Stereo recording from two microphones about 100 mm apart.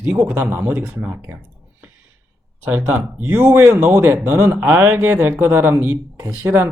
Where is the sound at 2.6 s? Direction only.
20° right (ahead or behind).